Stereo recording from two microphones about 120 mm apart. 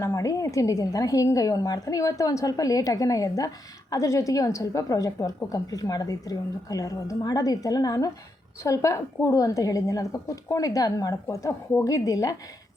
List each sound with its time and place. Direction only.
0.0 s a woman's voice: 25° left (ahead or behind)